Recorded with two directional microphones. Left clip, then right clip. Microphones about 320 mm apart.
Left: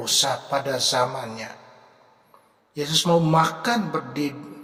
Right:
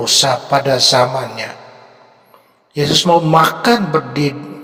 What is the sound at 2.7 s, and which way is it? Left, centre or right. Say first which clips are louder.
Speech: right 9 dB; right.